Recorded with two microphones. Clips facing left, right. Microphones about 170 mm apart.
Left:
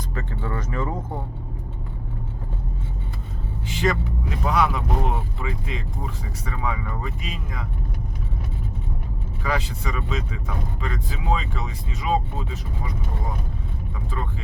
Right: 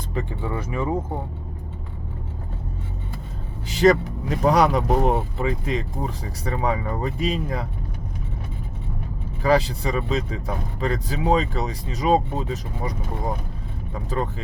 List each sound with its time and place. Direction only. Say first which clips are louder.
0.1 s speech: right 4 dB; 15° right (ahead or behind)
3.7 s speech: right 7 dB; 40° right (ahead or behind)
9.4 s speech: right 8 dB; 35° right (ahead or behind)